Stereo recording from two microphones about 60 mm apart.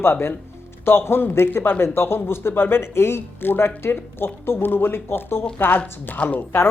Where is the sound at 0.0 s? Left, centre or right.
Left.